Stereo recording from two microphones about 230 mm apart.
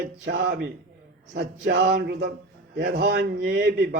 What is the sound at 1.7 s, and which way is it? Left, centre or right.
Speech, right.